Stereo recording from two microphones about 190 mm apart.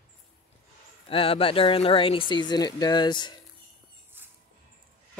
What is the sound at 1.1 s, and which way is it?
Speech, 30° left (ahead or behind).